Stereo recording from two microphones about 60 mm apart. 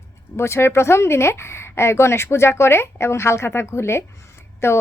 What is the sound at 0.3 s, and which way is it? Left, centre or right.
Speech, left.